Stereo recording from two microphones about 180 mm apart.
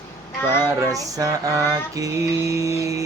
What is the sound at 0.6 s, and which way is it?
Music, 20° right (ahead or behind).